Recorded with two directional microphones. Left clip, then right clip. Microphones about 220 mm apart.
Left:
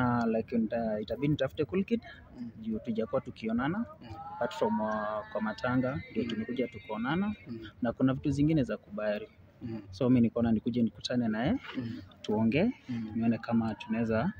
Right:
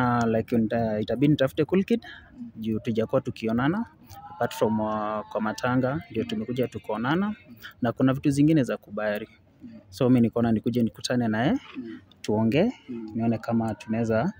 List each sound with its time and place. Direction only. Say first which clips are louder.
0.0 s speech: right 6 dB; 55° right (ahead or behind)